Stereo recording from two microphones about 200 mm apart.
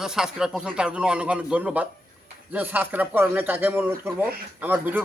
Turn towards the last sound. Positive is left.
turn(degrees=-10)  # may be behind; listen again after turning